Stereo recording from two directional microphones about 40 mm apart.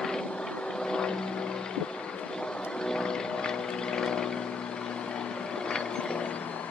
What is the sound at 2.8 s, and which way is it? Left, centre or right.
Vehicle, centre.